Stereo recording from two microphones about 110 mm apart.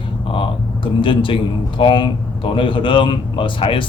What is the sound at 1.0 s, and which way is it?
Speech, 50° left (ahead or behind).